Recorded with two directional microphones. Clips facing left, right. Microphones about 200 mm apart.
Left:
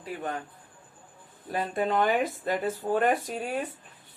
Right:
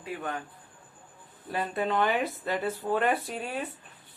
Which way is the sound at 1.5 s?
45° left (ahead or behind).